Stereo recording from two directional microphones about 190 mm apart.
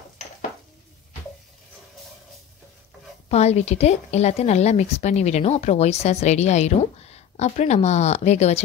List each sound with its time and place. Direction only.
3.3 s a woman's voice: 35° left (ahead or behind)